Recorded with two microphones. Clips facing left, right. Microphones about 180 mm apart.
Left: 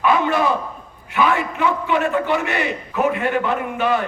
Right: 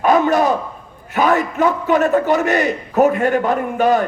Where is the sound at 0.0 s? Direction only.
40° right (ahead or behind).